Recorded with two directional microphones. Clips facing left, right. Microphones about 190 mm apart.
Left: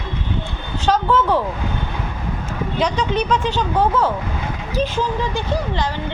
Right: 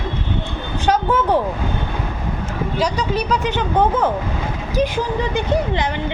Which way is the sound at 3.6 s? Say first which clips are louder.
Right 2 dB; 20° right (ahead or behind).